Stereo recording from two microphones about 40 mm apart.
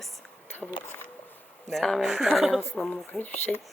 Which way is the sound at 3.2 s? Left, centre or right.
Left.